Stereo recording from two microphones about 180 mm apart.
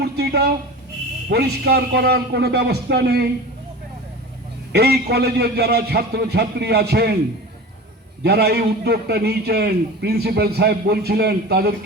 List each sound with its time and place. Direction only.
0.0 s a sound: 65° right (ahead or behind)
1.3 s a man's voice: 65° right (ahead or behind)
4.7 s a man's voice: 60° right (ahead or behind)
8.2 s a man's voice: 65° right (ahead or behind)